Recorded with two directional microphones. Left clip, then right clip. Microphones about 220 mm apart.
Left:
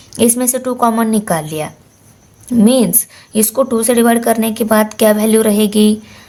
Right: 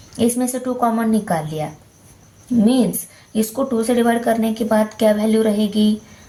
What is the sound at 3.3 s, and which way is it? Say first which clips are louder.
Speech: left 6 dB; 40° left (ahead or behind).